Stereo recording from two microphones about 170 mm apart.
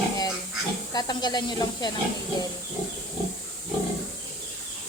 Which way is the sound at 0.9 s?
25° left (ahead or behind).